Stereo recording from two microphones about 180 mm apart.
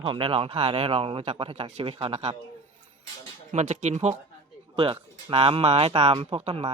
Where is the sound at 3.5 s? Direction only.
40° right (ahead or behind).